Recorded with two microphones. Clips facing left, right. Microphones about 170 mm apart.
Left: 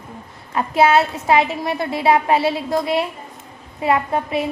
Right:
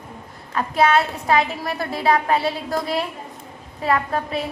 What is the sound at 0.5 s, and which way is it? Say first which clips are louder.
A woman's voice: left 3 dB; 25° left (ahead or behind).